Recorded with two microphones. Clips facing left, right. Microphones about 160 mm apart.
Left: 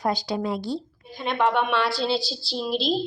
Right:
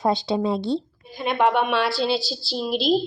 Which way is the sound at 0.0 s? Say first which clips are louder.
Right 4 dB; 25° right (ahead or behind).